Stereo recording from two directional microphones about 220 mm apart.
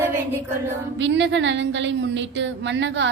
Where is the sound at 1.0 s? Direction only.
55° right (ahead or behind).